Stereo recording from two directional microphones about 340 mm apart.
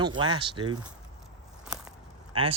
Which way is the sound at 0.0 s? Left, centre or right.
Centre.